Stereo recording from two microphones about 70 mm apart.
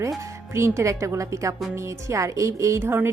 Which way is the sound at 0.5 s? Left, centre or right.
Right.